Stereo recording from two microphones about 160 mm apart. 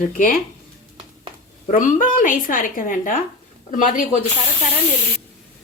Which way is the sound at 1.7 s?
55° left (ahead or behind).